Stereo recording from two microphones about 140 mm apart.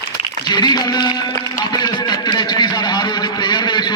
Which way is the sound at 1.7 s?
30° left (ahead or behind).